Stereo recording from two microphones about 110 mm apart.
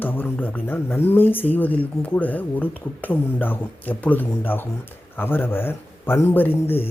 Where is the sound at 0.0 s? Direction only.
20° left (ahead or behind).